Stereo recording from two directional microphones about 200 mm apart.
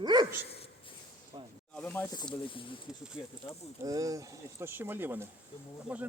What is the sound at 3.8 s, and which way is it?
Speech, 15° right (ahead or behind).